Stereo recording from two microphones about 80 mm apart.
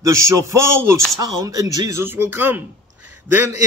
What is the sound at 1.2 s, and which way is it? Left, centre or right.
Speech, right.